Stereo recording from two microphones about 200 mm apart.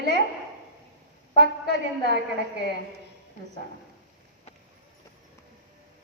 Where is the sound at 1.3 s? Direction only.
60° right (ahead or behind).